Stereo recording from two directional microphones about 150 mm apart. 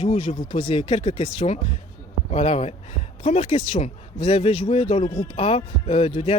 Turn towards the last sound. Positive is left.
turn(degrees=40)  # may be behind; listen again after turning